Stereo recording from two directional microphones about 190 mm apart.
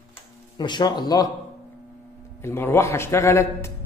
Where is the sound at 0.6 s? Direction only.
20° left (ahead or behind).